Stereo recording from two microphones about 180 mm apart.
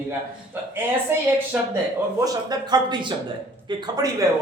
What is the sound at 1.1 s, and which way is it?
Speech, 10° right (ahead or behind).